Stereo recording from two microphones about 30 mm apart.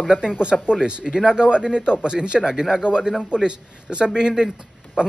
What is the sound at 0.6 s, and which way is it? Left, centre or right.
Speech, right.